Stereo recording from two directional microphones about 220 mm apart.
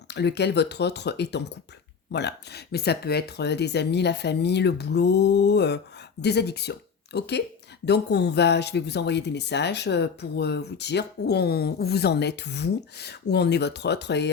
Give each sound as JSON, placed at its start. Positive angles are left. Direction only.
{"t": 0.1, "sound": "speech", "side_deg": 50}